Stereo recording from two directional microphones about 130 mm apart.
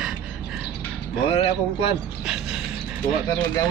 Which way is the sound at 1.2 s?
50° left (ahead or behind).